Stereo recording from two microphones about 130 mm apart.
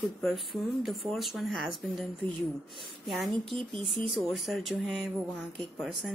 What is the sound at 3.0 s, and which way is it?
Speech, centre (ahead or behind).